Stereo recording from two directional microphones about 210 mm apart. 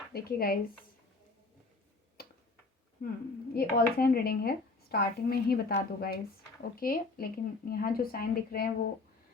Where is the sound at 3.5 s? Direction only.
45° left (ahead or behind).